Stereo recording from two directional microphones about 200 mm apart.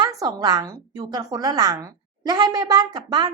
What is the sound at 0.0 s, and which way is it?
A woman's voice, 20° right (ahead or behind).